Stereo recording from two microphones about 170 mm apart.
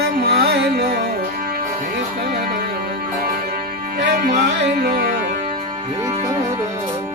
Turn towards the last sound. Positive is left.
turn(degrees=-60)  # may be behind; listen again after turning